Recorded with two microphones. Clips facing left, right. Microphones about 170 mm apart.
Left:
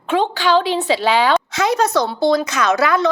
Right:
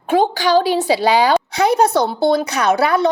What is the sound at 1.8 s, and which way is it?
Speech, 55° right (ahead or behind).